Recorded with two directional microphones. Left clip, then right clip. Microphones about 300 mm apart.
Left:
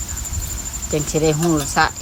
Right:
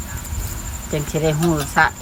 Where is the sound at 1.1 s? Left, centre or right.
Centre.